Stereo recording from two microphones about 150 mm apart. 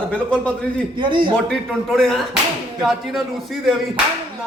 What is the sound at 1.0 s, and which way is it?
Speech, 35° right (ahead or behind).